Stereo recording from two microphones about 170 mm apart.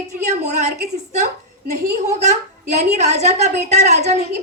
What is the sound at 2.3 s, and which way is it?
A woman's voice, 45° right (ahead or behind).